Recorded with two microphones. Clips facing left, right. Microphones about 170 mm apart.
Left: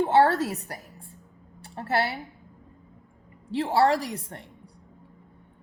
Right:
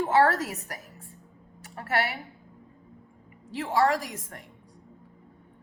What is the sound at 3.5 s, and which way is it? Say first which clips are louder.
Speech: left 3 dB; 30° left (ahead or behind).